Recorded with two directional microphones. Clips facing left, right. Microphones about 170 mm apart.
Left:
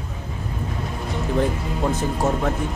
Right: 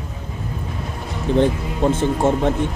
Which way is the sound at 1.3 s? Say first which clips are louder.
Right 6 dB; 30° right (ahead or behind).